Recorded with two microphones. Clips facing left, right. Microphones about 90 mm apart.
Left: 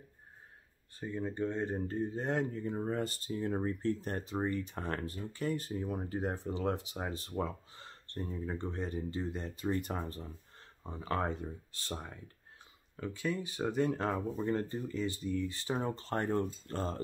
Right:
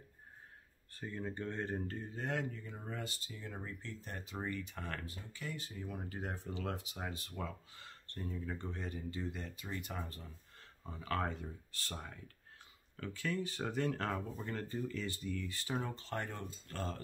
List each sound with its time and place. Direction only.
0.9 s speech: 15° left (ahead or behind)
15.9 s speech: 40° left (ahead or behind)